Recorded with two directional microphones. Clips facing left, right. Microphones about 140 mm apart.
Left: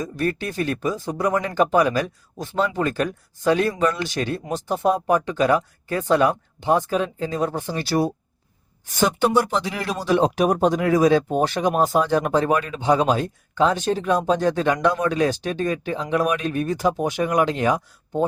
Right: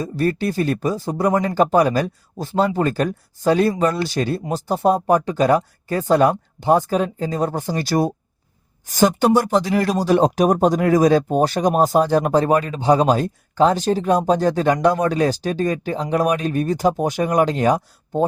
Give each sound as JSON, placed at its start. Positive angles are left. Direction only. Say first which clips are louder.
{"t": 0.0, "sound": "speech", "louder": "right 4 dB", "side_deg": -35}